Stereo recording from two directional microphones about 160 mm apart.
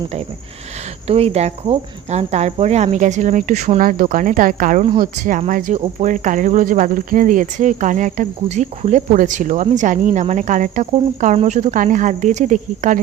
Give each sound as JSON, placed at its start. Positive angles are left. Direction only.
{"t": 1.0, "sound": "speech", "side_deg": -40}